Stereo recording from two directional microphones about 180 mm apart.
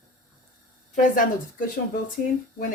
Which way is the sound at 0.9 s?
50° left (ahead or behind).